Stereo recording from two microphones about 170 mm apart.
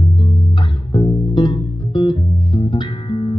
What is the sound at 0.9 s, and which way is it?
Music, 25° left (ahead or behind).